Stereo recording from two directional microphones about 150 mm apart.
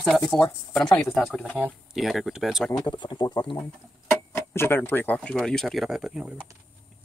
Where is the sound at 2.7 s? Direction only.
30° left (ahead or behind).